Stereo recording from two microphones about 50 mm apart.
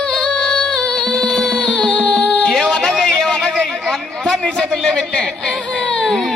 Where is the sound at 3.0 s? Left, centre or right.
Centre.